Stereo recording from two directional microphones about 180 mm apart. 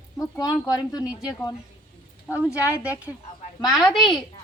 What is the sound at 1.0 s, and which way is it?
Speech, 5° right (ahead or behind).